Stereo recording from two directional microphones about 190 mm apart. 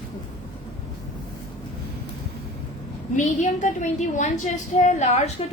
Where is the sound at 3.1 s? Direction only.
40° left (ahead or behind).